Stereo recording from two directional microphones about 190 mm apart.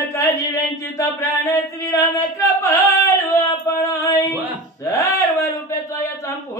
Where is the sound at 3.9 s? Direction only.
15° left (ahead or behind).